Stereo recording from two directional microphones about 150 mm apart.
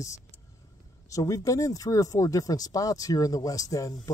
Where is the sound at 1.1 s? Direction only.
20° left (ahead or behind).